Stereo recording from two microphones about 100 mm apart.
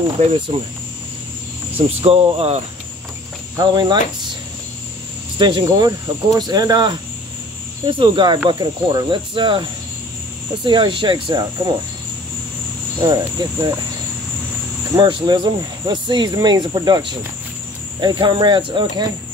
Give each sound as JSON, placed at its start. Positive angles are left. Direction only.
{"t": 2.0, "sound": "speech", "side_deg": -85}
{"t": 3.5, "sound": "speech", "side_deg": -50}
{"t": 5.4, "sound": "cricket", "side_deg": -45}
{"t": 7.8, "sound": "speech", "side_deg": -55}
{"t": 13.0, "sound": "cricket", "side_deg": -40}
{"t": 15.0, "sound": "speech", "side_deg": -45}
{"t": 18.0, "sound": "speech", "side_deg": -45}